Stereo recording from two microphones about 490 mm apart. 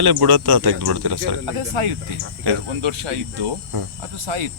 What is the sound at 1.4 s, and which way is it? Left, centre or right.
Speech, right.